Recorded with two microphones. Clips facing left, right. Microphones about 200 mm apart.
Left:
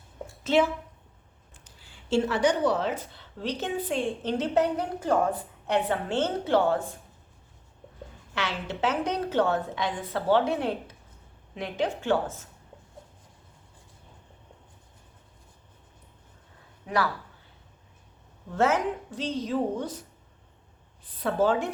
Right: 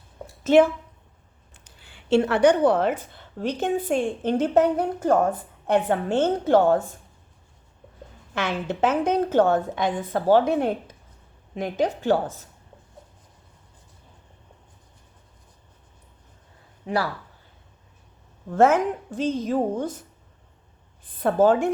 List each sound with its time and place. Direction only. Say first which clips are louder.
0.4 s a woman's voice: right 7 dB; 50° right (ahead or behind)
1.8 s a woman's voice: right 5 dB; 65° right (ahead or behind); by 6.7 s 45° right (ahead or behind)
8.4 s a woman's voice: right 6 dB; 50° right (ahead or behind)
16.8 s speech: right 2 dB; 30° right (ahead or behind)
18.5 s a woman's voice: right 6 dB; 50° right (ahead or behind)
21.2 s a woman's voice: right 6 dB; 50° right (ahead or behind)